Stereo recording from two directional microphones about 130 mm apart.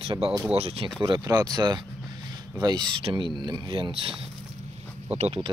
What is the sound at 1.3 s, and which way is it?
Speech, 30° right (ahead or behind).